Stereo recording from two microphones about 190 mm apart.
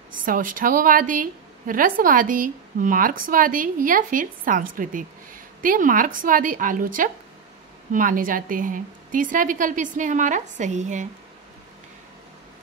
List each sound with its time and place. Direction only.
0.1 s a woman's voice: 45° right (ahead or behind)